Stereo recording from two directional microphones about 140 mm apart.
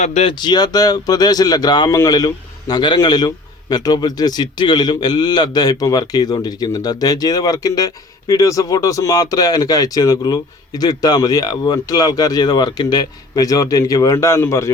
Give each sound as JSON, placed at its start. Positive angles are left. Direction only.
{"t": 0.0, "sound": "speech", "side_deg": 50}
{"t": 0.3, "sound": "a man's voice", "side_deg": 30}